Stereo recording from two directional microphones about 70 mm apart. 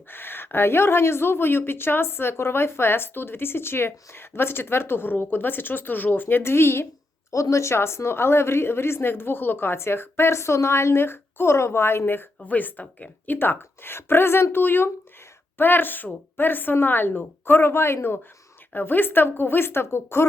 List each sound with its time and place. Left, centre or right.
0.1 s a woman's voice: left